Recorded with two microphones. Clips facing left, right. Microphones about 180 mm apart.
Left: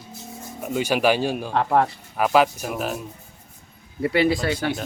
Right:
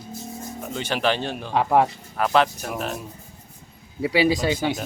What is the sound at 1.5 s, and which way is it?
Speech, 10° right (ahead or behind).